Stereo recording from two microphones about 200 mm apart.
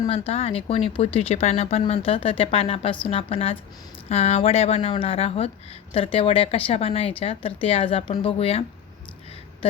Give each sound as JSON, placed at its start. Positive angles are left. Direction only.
{"t": 0.1, "sound": "speech", "side_deg": 30}